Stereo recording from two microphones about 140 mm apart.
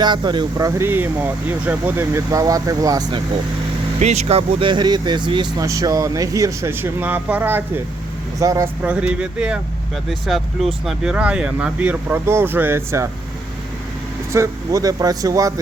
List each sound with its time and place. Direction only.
0.0 s speech: 30° right (ahead or behind)
4.0 s speech: 50° right (ahead or behind); by 5.6 s 35° right (ahead or behind)
5.6 s speech: 25° right (ahead or behind)
8.8 s speech: 10° right (ahead or behind)
14.3 s speech: 20° right (ahead or behind)